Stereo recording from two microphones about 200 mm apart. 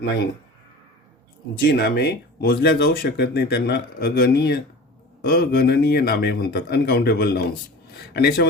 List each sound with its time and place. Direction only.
1.6 s speech: 55° left (ahead or behind)